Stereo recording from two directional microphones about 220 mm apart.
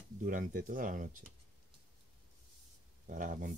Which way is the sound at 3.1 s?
35° right (ahead or behind).